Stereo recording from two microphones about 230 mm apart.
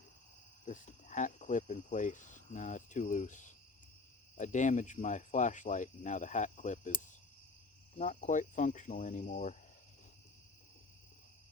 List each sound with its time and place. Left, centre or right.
0.6 s speech: left